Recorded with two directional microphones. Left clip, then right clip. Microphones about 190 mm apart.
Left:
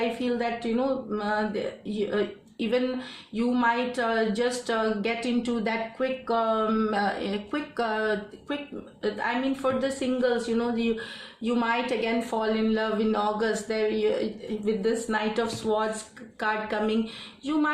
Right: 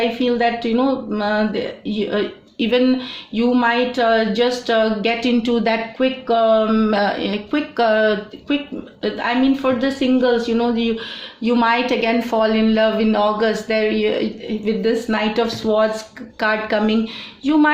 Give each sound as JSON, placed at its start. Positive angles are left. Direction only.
{"t": 0.2, "sound": "a woman's voice", "side_deg": -30}